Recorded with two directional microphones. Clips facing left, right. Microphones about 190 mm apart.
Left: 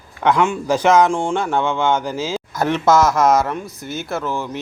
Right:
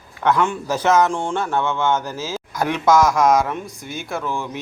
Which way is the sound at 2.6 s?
10° right (ahead or behind).